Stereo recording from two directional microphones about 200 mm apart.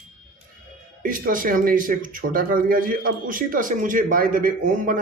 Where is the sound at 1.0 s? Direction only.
45° right (ahead or behind).